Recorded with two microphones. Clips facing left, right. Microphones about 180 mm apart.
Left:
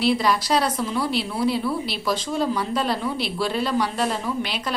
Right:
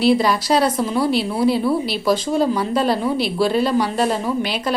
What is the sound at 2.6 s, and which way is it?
A woman's voice, 5° right (ahead or behind).